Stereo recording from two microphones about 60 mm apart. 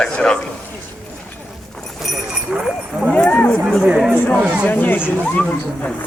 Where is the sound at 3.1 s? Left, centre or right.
Left.